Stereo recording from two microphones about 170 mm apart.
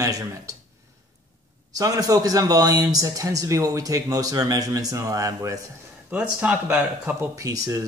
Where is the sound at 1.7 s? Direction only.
20° right (ahead or behind).